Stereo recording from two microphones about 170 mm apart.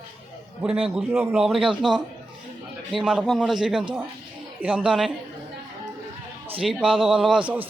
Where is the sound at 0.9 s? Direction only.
5° right (ahead or behind).